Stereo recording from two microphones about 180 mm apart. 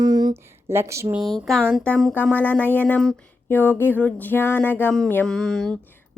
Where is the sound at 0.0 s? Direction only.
20° right (ahead or behind).